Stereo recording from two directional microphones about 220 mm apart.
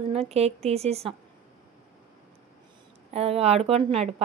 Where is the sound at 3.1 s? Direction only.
30° right (ahead or behind).